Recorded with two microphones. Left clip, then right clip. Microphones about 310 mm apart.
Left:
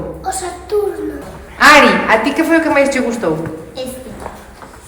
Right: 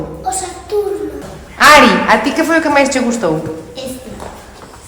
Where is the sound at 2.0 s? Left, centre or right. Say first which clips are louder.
Right 1 dB; right.